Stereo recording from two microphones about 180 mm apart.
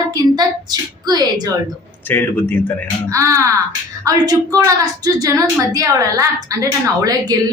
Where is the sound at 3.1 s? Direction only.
15° right (ahead or behind).